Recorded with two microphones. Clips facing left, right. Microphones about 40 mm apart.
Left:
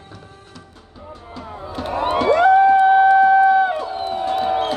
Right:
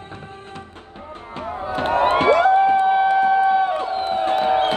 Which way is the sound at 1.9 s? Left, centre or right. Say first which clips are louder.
Right 1 dB; right.